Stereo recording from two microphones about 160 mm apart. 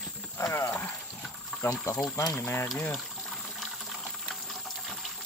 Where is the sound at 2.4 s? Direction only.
15° left (ahead or behind).